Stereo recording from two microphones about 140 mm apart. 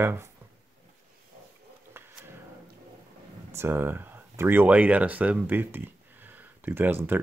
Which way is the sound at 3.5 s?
15° right (ahead or behind).